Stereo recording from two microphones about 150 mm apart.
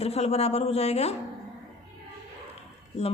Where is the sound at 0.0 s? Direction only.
45° left (ahead or behind).